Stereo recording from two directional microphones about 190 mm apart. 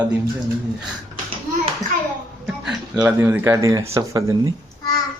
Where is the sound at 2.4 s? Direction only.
5° right (ahead or behind).